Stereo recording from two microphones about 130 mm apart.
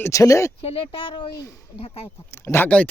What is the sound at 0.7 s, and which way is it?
Speech, 45° left (ahead or behind).